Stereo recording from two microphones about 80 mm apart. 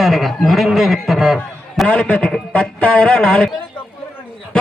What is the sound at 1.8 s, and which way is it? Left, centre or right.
Music, centre.